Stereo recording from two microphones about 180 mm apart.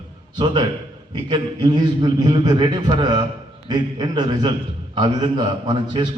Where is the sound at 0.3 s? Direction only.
25° right (ahead or behind).